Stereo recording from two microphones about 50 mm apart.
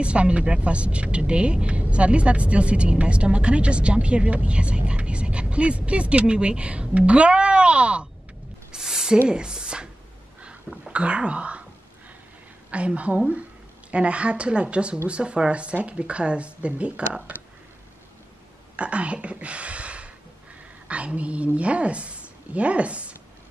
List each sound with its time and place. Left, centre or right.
0.0 s speech: right
8.7 s a sound: centre
9.3 s speech: centre
10.9 s speech: right
12.7 s speech: right
18.8 s a woman's voice: right